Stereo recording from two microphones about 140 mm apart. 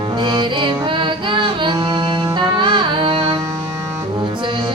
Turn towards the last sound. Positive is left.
turn(degrees=-35)  # may be behind; listen again after turning